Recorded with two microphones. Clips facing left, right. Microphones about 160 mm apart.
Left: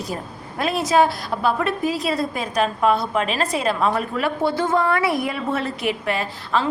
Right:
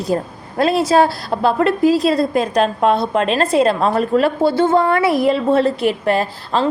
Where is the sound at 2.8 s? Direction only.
30° right (ahead or behind).